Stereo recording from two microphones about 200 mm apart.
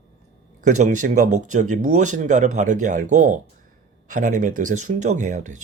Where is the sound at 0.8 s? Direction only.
40° right (ahead or behind).